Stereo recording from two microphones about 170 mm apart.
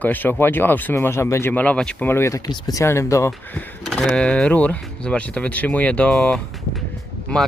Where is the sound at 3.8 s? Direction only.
Centre (ahead or behind).